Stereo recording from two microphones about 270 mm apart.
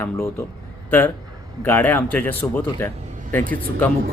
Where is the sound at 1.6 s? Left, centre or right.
Centre.